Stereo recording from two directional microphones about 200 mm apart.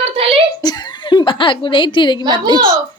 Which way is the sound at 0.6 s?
20° left (ahead or behind).